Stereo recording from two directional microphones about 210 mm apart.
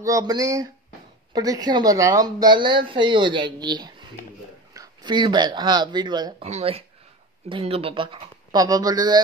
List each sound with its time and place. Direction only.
0.0 s speech: 15° right (ahead or behind)